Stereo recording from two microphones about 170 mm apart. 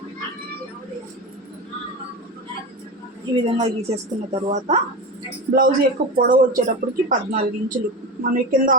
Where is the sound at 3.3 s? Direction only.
35° right (ahead or behind).